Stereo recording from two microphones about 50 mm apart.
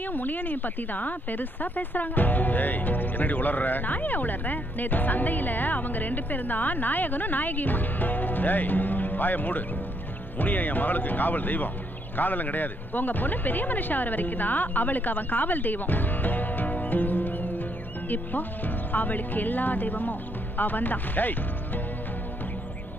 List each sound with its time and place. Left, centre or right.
0.0 s speech: left